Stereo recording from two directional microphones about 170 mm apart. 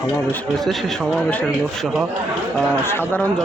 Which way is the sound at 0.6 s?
Centre (ahead or behind).